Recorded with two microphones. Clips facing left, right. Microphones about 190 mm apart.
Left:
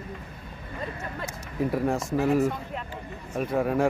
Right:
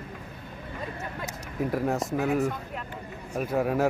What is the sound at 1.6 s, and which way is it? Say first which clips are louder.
Speech: left 1 dB; centre (ahead or behind).